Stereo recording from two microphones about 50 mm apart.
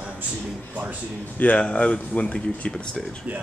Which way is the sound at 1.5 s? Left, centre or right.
Left.